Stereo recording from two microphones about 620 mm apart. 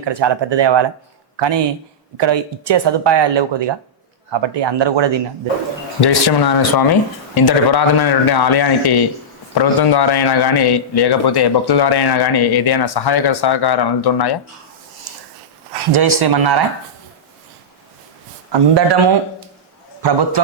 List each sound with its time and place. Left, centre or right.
0.0 s speech: right
6.0 s a man's voice: left
15.9 s speech: right
18.5 s speech: right